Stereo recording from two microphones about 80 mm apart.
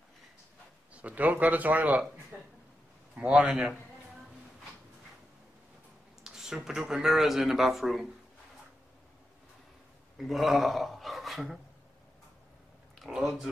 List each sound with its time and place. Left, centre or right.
0.9 s speech: centre
2.3 s a sound: centre
3.2 s speech: centre
6.2 s speech: centre
10.1 s speech: centre
13.0 s speech: centre